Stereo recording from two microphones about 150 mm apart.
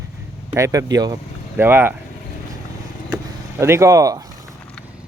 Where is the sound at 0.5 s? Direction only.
20° right (ahead or behind).